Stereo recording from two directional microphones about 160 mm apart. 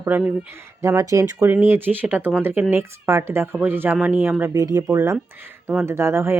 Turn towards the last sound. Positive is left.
turn(degrees=-15)  # may be behind; listen again after turning